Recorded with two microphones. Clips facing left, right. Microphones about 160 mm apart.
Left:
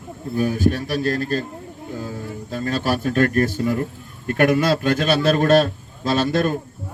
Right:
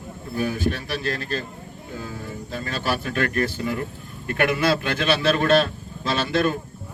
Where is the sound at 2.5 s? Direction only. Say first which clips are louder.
Left 5 dB; 45° left (ahead or behind).